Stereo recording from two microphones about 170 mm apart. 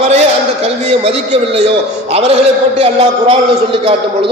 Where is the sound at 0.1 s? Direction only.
40° right (ahead or behind).